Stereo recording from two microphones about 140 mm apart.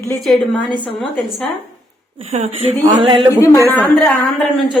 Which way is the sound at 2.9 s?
35° right (ahead or behind).